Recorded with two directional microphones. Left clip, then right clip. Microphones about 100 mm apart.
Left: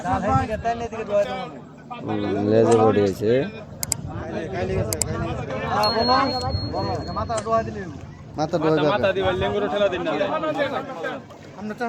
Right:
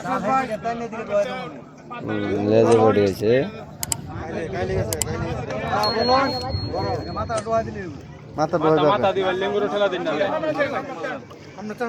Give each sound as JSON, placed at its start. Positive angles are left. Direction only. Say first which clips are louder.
{"t": 0.6, "sound": "speech", "louder": "left 2 dB", "side_deg": -10}
{"t": 8.4, "sound": "a man's voice", "louder": "right 2 dB", "side_deg": -25}